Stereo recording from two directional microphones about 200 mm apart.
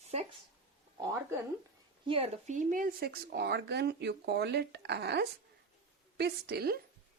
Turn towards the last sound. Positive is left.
turn(degrees=-50)  # may be behind; listen again after turning